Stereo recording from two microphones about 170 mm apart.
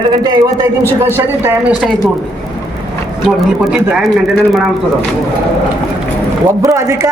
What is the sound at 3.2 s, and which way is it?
Speech, 5° right (ahead or behind).